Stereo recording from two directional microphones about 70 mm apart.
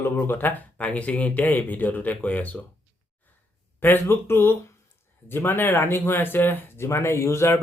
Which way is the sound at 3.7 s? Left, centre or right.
Left.